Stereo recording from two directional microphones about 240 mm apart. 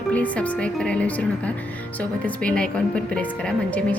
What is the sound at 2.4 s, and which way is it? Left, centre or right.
Speech, centre.